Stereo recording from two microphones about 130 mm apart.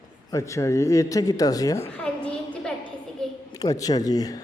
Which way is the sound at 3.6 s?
30° left (ahead or behind).